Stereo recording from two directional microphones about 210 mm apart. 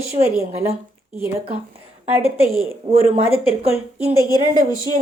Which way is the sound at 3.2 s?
30° right (ahead or behind).